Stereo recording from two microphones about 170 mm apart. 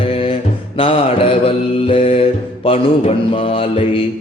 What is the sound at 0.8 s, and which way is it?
Mantra, 35° left (ahead or behind).